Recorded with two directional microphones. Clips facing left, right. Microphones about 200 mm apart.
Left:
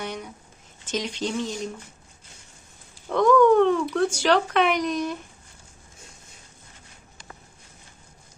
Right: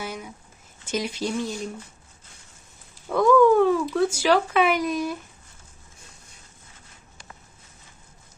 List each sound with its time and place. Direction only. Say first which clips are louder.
0.0 s a sound: left 1 dB; 5° right (ahead or behind)
0.9 s speech: right 1 dB; 10° right (ahead or behind)
3.1 s speech: even; 5° right (ahead or behind)